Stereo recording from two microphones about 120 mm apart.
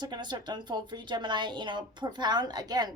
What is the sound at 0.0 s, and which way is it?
A woman's voice, 35° right (ahead or behind).